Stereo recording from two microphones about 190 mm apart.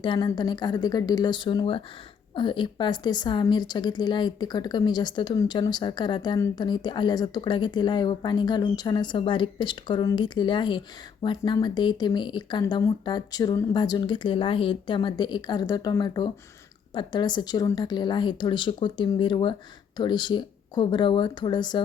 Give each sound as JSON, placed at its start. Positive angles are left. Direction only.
{"t": 0.0, "sound": "a woman's voice", "side_deg": 25}